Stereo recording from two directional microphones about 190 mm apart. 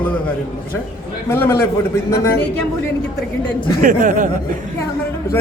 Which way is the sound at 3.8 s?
45° right (ahead or behind).